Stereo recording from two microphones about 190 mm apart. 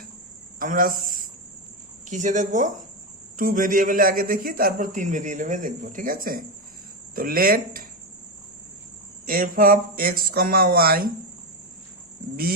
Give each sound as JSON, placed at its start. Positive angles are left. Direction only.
{"t": 0.6, "sound": "a man's voice", "side_deg": -45}
{"t": 9.2, "sound": "a man's voice", "side_deg": -45}
{"t": 12.2, "sound": "insect", "side_deg": -45}